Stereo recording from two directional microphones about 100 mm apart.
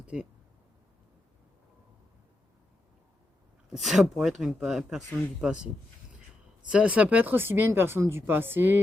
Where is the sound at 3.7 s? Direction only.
Centre (ahead or behind).